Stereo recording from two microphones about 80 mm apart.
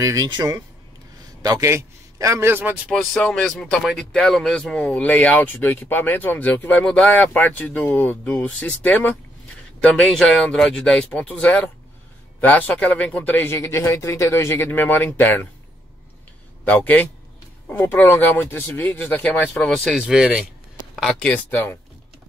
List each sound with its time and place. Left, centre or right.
0.0 s speech: right
1.4 s a man's voice: right
1.7 s a man's voice: right
2.5 s speech: right
2.9 s speech: centre
4.4 s speech: centre; by 9.2 s left
9.9 s speech: centre; by 13.6 s left
13.6 s speech: left
16.6 s speech: left
19.7 s speech: centre
20.0 s speech: centre
20.9 s a sound: centre
21.2 s speech: centre